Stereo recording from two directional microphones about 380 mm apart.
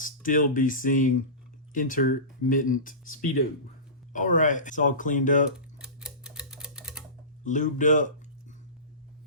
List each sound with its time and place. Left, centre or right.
0.0 s speech: left
5.5 s typewriter: centre
7.4 s speech: centre